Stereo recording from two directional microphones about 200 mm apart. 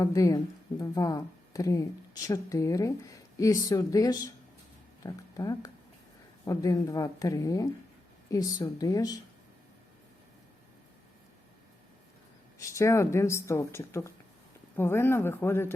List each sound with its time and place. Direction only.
0.0 s speech: 15° left (ahead or behind)
12.5 s speech: 15° left (ahead or behind)